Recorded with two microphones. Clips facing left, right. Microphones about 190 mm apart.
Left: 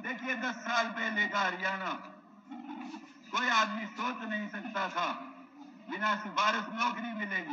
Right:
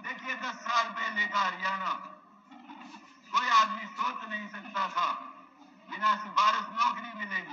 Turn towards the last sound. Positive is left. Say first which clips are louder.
# left 5 dB
turn(degrees=50)  # may be behind; listen again after turning